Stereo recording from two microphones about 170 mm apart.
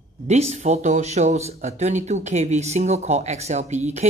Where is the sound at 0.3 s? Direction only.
40° right (ahead or behind).